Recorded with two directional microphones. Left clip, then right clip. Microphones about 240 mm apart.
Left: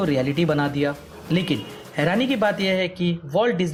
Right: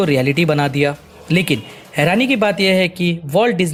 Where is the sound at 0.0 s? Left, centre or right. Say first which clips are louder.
Right 6 dB; right.